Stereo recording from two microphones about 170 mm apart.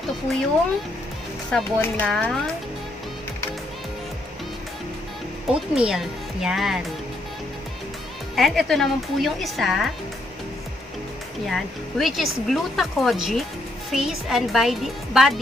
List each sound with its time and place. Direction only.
1.5 s speech: 10° left (ahead or behind)
5.5 s speech: 5° right (ahead or behind)
8.4 s speech: centre (ahead or behind)
11.4 s speech: centre (ahead or behind)